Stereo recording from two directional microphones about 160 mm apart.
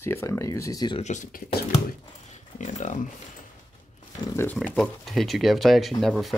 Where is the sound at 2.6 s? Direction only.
50° left (ahead or behind).